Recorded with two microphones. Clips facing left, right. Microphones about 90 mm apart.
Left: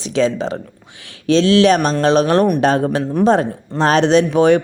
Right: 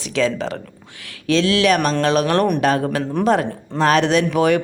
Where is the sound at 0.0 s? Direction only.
25° left (ahead or behind).